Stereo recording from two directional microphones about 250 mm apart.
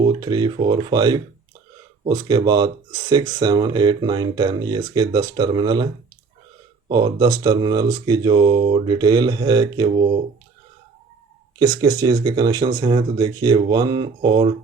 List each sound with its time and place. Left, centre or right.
0.0 s speech: centre
11.6 s speech: centre